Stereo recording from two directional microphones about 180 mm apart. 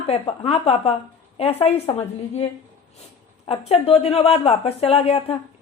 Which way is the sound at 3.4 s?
30° left (ahead or behind).